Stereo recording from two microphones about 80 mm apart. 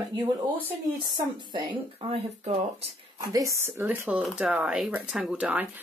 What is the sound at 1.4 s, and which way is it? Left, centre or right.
Speech, right.